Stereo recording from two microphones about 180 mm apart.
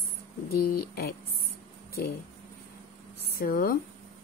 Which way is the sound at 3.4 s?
50° left (ahead or behind).